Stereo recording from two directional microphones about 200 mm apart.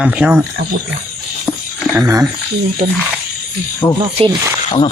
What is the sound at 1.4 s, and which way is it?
Music, 15° left (ahead or behind).